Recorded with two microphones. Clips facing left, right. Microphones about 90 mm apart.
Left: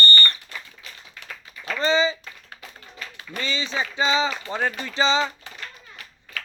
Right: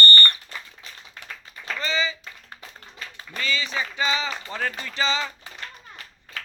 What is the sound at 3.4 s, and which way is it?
Speech, 25° left (ahead or behind).